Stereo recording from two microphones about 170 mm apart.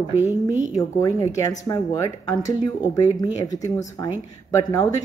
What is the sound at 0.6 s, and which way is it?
Speech, 20° left (ahead or behind).